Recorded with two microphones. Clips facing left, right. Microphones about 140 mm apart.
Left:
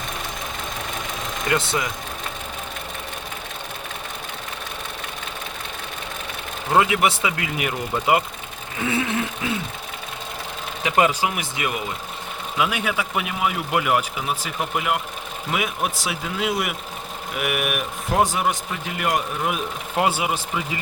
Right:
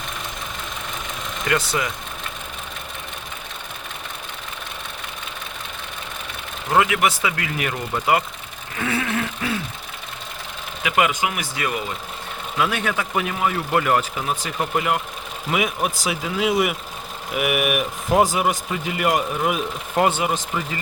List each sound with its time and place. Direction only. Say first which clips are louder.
1.5 s speech: right 1 dB; 25° left (ahead or behind)
6.7 s speech: even; 25° left (ahead or behind)
8.8 s a sound: even; 20° left (ahead or behind)
10.8 s speech: left 1 dB; 30° left (ahead or behind)
11.5 s a man's voice: right 1 dB; 20° left (ahead or behind)